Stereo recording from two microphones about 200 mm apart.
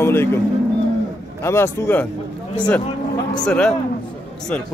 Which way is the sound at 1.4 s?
15° left (ahead or behind).